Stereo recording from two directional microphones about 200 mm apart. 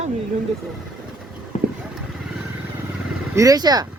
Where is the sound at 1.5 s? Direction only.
35° left (ahead or behind).